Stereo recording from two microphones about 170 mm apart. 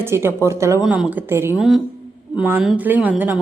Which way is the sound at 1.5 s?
Centre (ahead or behind).